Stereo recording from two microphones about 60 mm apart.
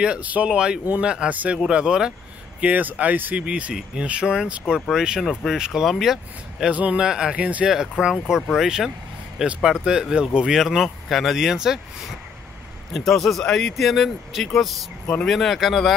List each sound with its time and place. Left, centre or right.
0.0 s speech: right
1.3 s speech: right
1.7 s speech: centre
2.6 s speech: right; by 6.1 s centre
6.7 s speech: right
7.0 s speech: centre
7.6 s speech: centre
11.3 s speech: centre
12.9 s speech: centre